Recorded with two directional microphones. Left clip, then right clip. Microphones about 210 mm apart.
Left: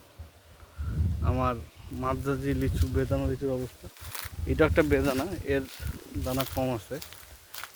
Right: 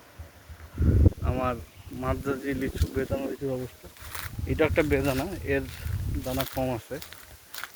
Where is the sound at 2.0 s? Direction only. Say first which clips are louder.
Even; 10° left (ahead or behind).